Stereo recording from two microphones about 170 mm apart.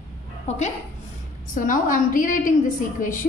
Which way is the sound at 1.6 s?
50° left (ahead or behind).